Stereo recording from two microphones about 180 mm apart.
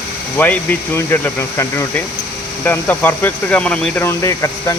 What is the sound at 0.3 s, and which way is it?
Speech, 10° left (ahead or behind).